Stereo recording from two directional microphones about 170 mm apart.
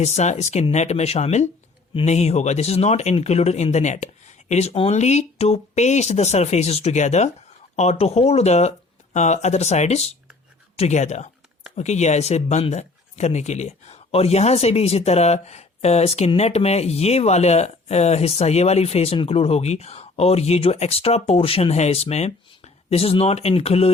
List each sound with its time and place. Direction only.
0.0 s speech: 40° left (ahead or behind)